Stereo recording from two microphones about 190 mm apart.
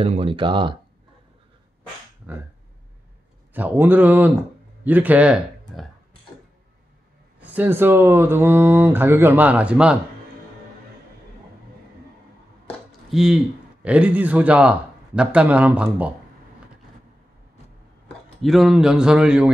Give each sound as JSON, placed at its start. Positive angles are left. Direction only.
{"t": 0.0, "sound": "speech", "side_deg": -30}
{"t": 2.3, "sound": "speech", "side_deg": -10}
{"t": 3.5, "sound": "speech", "side_deg": -10}
{"t": 7.3, "sound": "speech", "side_deg": -10}
{"t": 13.1, "sound": "a man's voice", "side_deg": 0}
{"t": 18.4, "sound": "a man's voice", "side_deg": 0}